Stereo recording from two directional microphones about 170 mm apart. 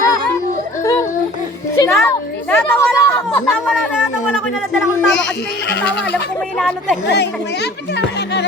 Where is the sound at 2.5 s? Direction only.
15° left (ahead or behind).